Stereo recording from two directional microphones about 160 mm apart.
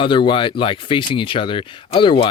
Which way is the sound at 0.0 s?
30° left (ahead or behind).